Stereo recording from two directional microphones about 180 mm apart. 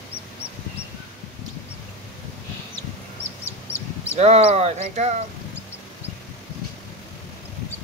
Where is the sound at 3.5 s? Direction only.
15° left (ahead or behind).